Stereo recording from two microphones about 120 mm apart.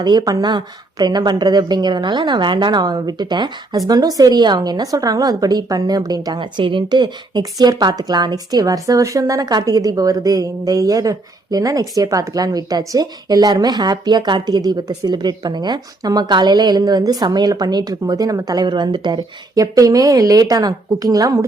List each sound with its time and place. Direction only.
0.0 s a woman's voice: 35° right (ahead or behind)